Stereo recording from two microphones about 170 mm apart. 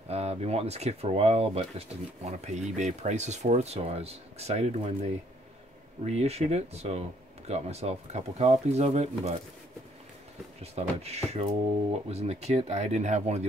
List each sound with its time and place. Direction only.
0.1 s speech: 40° right (ahead or behind)
10.6 s speech: 40° right (ahead or behind)